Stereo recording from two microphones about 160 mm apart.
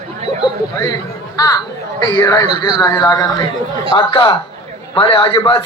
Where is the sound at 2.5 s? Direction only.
35° right (ahead or behind).